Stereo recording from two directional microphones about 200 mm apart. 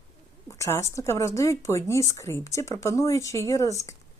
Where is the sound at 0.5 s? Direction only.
15° left (ahead or behind).